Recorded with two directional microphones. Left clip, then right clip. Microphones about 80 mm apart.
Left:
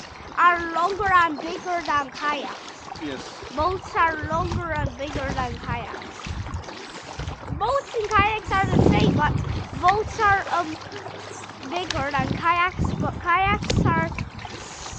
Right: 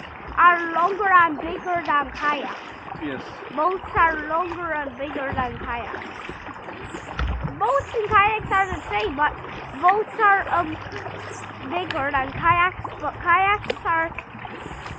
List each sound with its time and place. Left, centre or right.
0.5 s speech: left
2.2 s speech: left
3.0 s speech: left
3.6 s speech: left
4.7 s speech: left
7.6 s a child's voice: left
8.1 s speech: left
11.7 s speech: left